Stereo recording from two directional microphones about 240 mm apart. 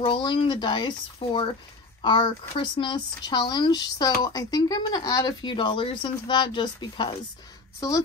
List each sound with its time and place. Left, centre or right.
0.0 s speech: left